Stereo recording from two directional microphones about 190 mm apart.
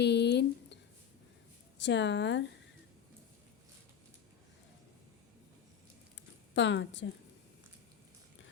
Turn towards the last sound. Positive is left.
turn(degrees=70)  # may be behind; listen again after turning